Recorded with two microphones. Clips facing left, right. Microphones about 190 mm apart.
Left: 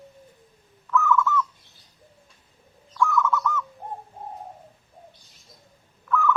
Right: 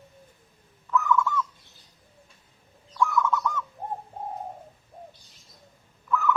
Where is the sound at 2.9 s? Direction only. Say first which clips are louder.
Left 1 dB; 15° right (ahead or behind).